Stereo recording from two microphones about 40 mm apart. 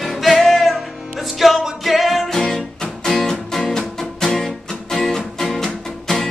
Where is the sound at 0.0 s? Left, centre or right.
Centre.